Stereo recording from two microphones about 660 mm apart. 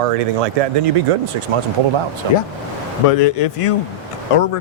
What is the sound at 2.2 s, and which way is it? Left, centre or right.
Speech, right.